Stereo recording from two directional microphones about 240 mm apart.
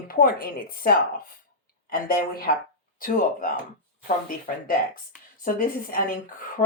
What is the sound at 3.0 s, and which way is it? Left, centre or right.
Speech, left.